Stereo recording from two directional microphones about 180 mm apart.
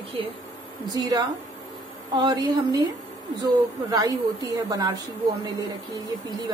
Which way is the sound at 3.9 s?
20° right (ahead or behind).